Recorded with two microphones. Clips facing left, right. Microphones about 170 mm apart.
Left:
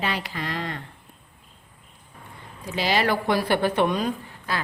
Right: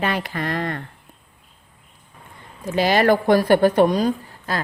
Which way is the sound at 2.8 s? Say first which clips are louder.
Right 6 dB; 50° right (ahead or behind).